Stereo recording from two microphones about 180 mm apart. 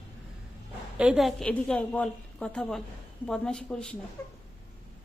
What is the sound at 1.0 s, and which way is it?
A woman's voice, 5° right (ahead or behind).